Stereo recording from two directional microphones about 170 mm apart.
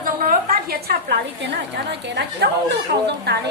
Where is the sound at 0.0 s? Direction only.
55° right (ahead or behind); by 1.5 s 80° right.